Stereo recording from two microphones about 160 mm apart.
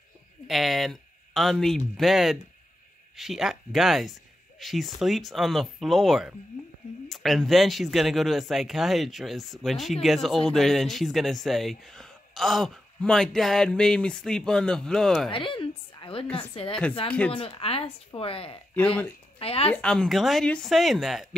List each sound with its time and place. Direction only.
0.5 s speech: centre (ahead or behind)
15.3 s a woman's voice: 30° left (ahead or behind)
19.7 s speech: 5° left (ahead or behind)